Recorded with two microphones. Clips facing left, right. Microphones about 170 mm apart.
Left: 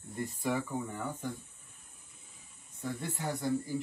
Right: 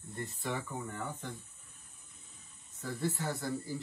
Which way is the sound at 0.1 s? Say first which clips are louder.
Left 5 dB; 15° left (ahead or behind).